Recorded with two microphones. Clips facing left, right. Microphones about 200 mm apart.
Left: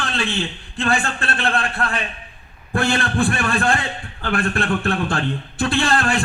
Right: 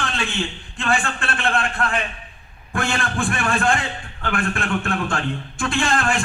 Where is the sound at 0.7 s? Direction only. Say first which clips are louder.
Left 2 dB; 35° left (ahead or behind).